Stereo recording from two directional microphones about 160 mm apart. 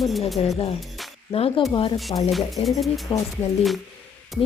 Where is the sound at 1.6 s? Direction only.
30° left (ahead or behind).